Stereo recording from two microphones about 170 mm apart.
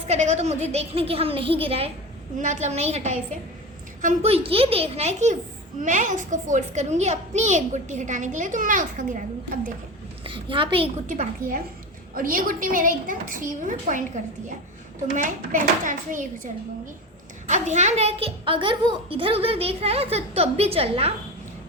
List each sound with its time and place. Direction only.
0.0 s a woman's voice: 40° right (ahead or behind)
2.4 s a woman's voice: 45° right (ahead or behind)
10.2 s a woman's voice: 30° right (ahead or behind)
11.0 s a child's voice: 50° right (ahead or behind)
15.1 s a child's voice: 50° right (ahead or behind)
17.5 s a woman's voice: 45° right (ahead or behind)